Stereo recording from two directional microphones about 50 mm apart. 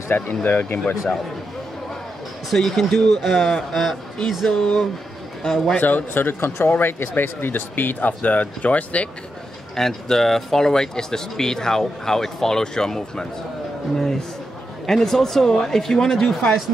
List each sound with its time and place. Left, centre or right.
0.1 s speech: left
0.5 s speech: left
2.5 s speech: centre
4.5 s speech: centre
5.8 s speech: left
8.2 s speech: left
9.8 s speech: centre
14.9 s speech: centre